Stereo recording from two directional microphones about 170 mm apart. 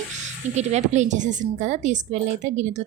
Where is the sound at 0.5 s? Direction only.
40° right (ahead or behind).